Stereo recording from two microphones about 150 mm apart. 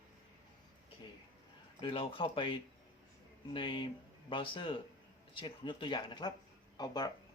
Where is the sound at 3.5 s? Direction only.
30° left (ahead or behind).